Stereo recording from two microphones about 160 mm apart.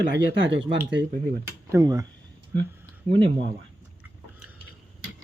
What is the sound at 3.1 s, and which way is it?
Speech, 30° right (ahead or behind).